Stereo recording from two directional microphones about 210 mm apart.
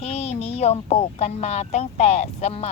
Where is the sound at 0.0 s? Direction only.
30° left (ahead or behind).